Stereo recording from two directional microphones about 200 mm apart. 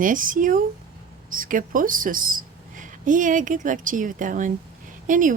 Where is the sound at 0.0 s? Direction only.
40° right (ahead or behind).